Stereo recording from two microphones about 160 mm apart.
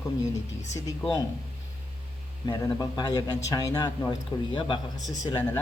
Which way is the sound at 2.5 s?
25° left (ahead or behind).